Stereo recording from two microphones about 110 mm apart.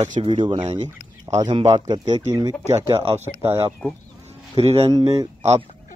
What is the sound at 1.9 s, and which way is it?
Speech, 90° right.